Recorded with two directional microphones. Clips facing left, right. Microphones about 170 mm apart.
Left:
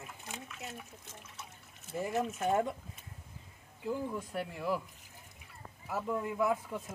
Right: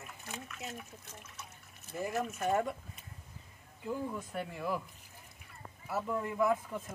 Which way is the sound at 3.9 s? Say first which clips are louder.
Left 1 dB; 5° left (ahead or behind).